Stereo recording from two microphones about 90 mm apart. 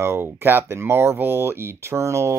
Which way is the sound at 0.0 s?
25° right (ahead or behind).